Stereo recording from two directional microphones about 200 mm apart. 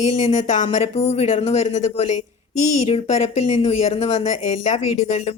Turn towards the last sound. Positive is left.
turn(degrees=35)  # may be behind; listen again after turning